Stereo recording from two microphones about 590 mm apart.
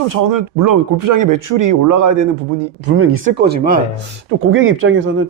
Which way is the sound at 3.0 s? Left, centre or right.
Centre.